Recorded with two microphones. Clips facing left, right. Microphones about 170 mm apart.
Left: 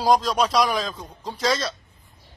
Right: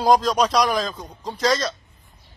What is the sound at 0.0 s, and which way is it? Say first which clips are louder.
Speech: right 2 dB; centre (ahead or behind).